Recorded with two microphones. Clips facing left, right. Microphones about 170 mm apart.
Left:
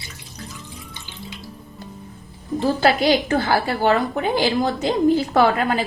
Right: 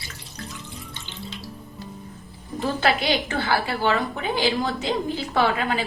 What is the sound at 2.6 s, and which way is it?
A woman's voice, 40° left (ahead or behind).